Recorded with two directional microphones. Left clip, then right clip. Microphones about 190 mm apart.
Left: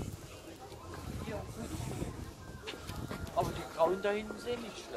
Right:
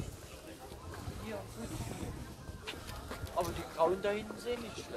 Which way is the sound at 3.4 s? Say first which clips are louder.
Left 1 dB; 40° right (ahead or behind).